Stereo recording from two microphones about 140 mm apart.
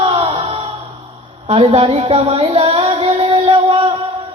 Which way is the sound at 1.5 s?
45° right (ahead or behind).